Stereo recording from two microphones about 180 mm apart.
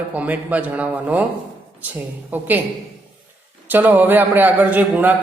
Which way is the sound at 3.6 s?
10° right (ahead or behind).